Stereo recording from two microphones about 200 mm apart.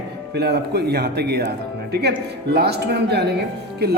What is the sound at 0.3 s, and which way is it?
Speech, 55° right (ahead or behind).